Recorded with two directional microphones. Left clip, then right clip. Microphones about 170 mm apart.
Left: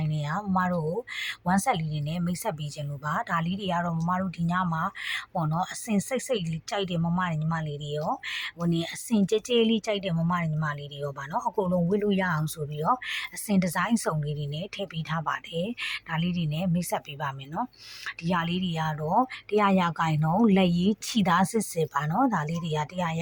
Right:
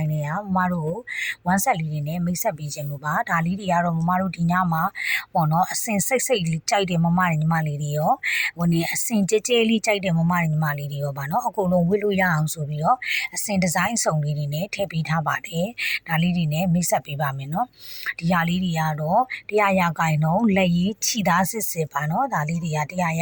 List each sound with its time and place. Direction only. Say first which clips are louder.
0.0 s speech: right 4 dB; 20° right (ahead or behind)